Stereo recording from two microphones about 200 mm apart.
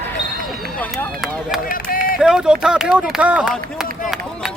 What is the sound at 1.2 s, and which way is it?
Speech, centre (ahead or behind).